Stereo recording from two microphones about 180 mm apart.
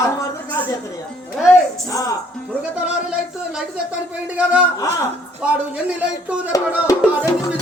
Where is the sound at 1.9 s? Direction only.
20° left (ahead or behind).